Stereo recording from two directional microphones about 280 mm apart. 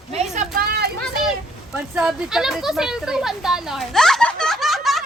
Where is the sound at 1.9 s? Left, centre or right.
Centre.